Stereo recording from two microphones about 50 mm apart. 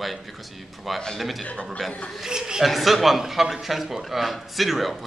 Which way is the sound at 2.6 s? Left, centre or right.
Centre.